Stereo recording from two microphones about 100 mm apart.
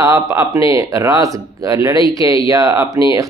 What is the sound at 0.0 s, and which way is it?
Speech, 35° right (ahead or behind).